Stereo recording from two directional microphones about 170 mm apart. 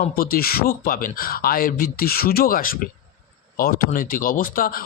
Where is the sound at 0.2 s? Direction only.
60° left (ahead or behind).